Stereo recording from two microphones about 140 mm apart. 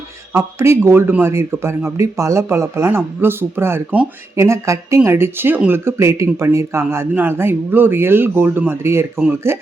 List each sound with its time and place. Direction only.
0.3 s speech: 20° right (ahead or behind)
9.1 s speech: 5° right (ahead or behind)